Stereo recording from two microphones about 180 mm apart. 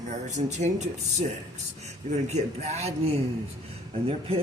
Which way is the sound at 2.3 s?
35° right (ahead or behind).